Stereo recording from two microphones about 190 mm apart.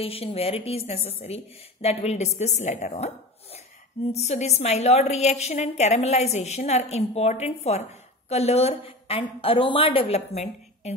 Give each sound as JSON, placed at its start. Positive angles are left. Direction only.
{"t": 0.0, "sound": "a woman's voice", "side_deg": 30}